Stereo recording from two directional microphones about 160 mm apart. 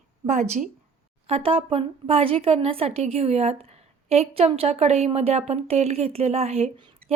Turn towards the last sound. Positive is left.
turn(degrees=-35)  # may be behind; listen again after turning